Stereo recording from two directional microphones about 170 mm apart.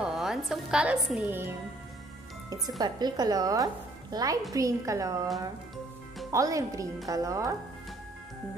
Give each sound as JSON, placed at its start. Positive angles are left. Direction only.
{"t": 0.0, "sound": "a woman's voice", "side_deg": 0}
{"t": 2.8, "sound": "speech", "side_deg": -25}
{"t": 6.3, "sound": "speech", "side_deg": -20}